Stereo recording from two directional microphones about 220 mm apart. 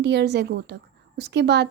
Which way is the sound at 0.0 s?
50° right (ahead or behind).